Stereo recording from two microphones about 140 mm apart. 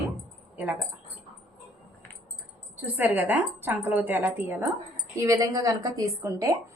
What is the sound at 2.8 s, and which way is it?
A woman's voice, 15° right (ahead or behind).